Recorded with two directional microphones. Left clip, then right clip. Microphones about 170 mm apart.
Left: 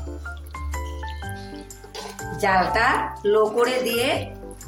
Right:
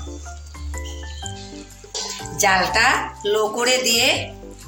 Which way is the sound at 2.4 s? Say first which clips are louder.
Right 3 dB; 10° left (ahead or behind).